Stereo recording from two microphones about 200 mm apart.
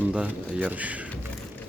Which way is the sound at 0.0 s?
10° right (ahead or behind).